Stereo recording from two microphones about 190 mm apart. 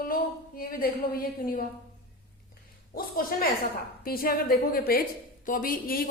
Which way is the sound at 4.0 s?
50° left (ahead or behind).